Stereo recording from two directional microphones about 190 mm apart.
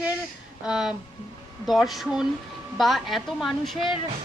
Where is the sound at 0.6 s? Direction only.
5° right (ahead or behind).